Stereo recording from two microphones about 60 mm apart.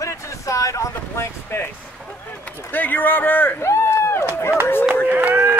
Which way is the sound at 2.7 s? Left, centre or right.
Left.